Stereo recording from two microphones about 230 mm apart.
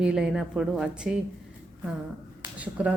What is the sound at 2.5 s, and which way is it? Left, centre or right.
Speech, centre.